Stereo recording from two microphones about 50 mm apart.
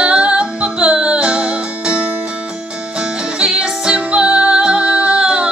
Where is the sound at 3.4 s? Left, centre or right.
Centre.